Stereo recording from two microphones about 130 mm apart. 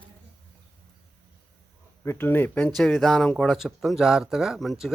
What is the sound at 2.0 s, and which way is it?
Speech, 15° left (ahead or behind).